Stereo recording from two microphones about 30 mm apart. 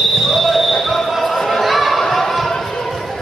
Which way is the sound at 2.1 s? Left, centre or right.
Centre.